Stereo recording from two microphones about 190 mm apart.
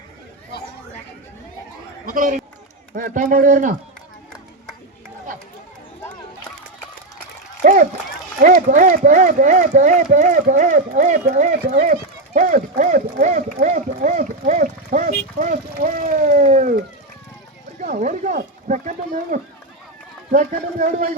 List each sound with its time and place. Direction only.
2.0 s a man's voice: 45° right (ahead or behind)
7.6 s speech: 40° right (ahead or behind)